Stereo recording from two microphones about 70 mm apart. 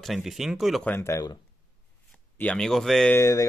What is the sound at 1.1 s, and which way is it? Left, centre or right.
Speech, left.